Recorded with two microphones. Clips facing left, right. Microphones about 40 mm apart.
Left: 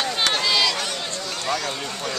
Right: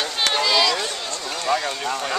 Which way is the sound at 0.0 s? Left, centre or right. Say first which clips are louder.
Right 1 dB; centre.